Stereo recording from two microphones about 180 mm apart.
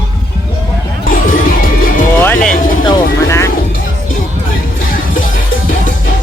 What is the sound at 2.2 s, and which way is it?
Music, 10° left (ahead or behind).